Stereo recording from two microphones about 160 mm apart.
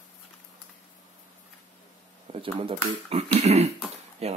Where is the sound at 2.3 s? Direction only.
35° right (ahead or behind).